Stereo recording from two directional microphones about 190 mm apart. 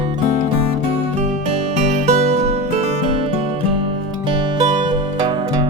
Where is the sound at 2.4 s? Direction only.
35° right (ahead or behind).